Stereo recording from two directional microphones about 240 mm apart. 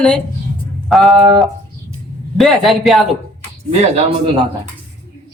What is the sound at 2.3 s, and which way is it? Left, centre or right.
Speech, centre.